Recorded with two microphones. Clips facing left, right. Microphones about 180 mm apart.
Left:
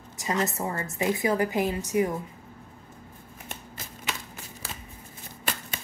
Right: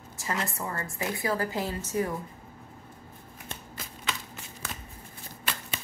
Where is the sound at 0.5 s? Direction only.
20° left (ahead or behind).